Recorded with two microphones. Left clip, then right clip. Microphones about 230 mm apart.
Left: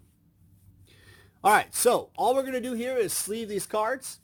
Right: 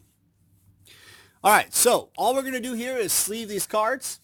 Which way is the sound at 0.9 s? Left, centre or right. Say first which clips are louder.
Right 6 dB; right.